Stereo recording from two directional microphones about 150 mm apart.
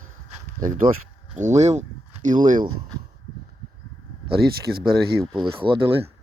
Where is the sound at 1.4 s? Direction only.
50° right (ahead or behind).